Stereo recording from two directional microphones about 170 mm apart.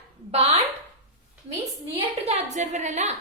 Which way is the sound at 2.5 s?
45° right (ahead or behind).